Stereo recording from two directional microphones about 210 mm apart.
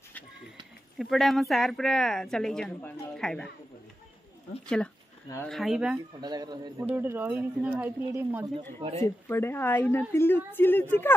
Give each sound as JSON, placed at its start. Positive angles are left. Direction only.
{"t": 0.9, "sound": "speech", "side_deg": 0}
{"t": 4.6, "sound": "speech", "side_deg": 5}
{"t": 6.2, "sound": "speech", "side_deg": -20}
{"t": 6.9, "sound": "speech", "side_deg": -10}
{"t": 9.0, "sound": "a woman's voice", "side_deg": 10}